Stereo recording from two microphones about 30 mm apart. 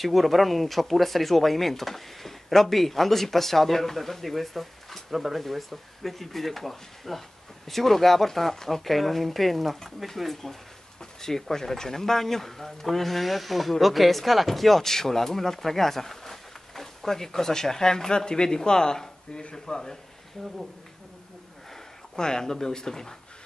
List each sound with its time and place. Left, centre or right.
0.0 s speech: centre
10.3 s speech: centre
22.1 s speech: left